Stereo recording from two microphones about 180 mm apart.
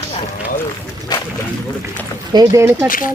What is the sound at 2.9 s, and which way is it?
Speech, 50° left (ahead or behind).